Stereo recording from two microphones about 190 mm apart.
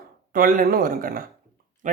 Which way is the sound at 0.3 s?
45° right (ahead or behind).